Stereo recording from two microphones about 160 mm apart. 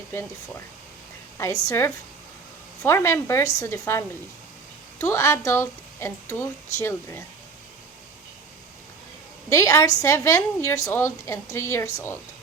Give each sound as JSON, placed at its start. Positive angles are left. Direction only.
{"t": 0.1, "sound": "speech", "side_deg": 15}
{"t": 1.6, "sound": "speech", "side_deg": 15}
{"t": 9.5, "sound": "a woman's voice", "side_deg": 20}